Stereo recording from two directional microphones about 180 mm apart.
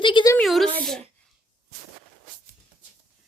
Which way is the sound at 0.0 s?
25° left (ahead or behind).